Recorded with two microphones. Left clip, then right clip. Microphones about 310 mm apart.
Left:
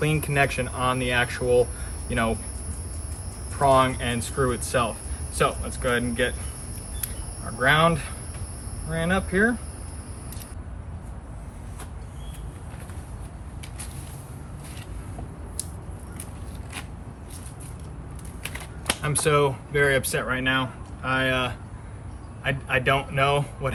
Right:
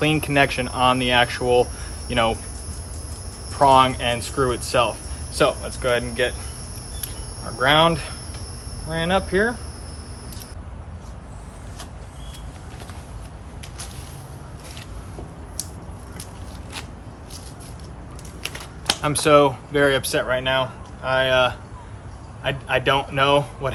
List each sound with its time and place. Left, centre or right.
0.0 s speech: centre
3.6 s speech: centre
7.6 s speech: centre
19.0 s speech: centre